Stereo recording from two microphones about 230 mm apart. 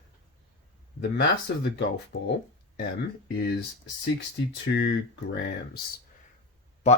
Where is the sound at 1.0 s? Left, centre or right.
Left.